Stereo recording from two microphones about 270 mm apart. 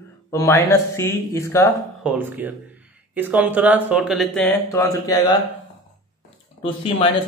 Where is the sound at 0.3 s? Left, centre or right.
Centre.